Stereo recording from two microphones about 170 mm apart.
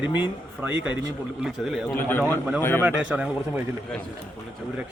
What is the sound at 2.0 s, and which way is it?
Speech, 10° left (ahead or behind).